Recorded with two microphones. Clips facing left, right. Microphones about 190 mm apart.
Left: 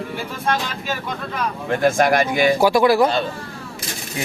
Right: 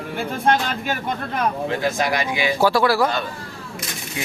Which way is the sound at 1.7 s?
50° left (ahead or behind).